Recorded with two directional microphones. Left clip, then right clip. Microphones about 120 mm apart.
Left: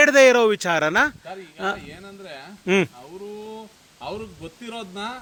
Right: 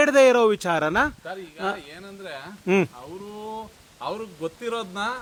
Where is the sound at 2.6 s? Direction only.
Centre (ahead or behind).